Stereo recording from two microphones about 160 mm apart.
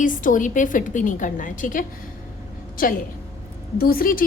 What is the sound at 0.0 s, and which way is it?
A woman's voice, 55° left (ahead or behind).